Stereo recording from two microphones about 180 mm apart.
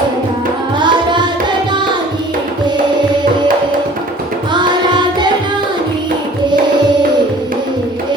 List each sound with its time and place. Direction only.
0.8 s tabla: 25° right (ahead or behind)
4.5 s music: 25° right (ahead or behind)